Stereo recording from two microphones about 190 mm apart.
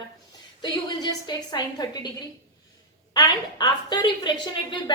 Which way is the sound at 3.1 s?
20° left (ahead or behind).